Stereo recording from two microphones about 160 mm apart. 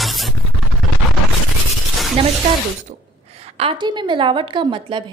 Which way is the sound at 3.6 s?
30° right (ahead or behind).